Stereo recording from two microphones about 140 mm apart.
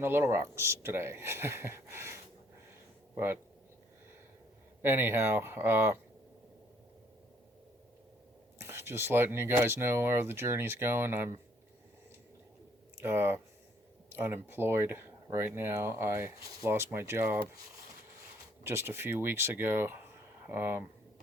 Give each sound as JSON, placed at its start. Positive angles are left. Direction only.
{"t": 0.0, "sound": "speech", "side_deg": -15}
{"t": 4.8, "sound": "speech", "side_deg": -15}
{"t": 8.6, "sound": "speech", "side_deg": -15}
{"t": 13.0, "sound": "speech", "side_deg": -15}
{"t": 18.6, "sound": "speech", "side_deg": -20}